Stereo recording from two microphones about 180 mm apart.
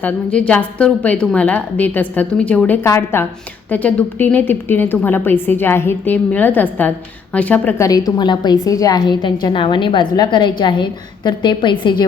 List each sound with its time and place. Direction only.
0.0 s a woman's voice: 5° left (ahead or behind); by 12.0 s 25° left (ahead or behind)